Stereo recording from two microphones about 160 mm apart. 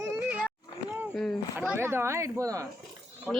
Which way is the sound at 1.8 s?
15° right (ahead or behind).